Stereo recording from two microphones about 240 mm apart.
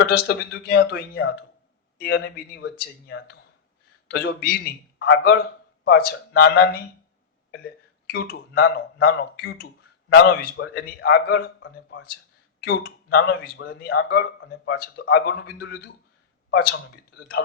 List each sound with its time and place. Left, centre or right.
0.0 s speech: left
8.6 s speech: left